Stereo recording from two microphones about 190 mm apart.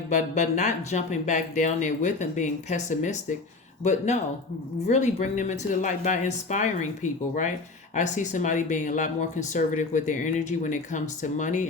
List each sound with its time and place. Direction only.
0.1 s speech: 40° left (ahead or behind)